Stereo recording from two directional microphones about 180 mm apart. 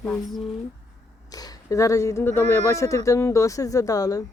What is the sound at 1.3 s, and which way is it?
Speech, 20° left (ahead or behind).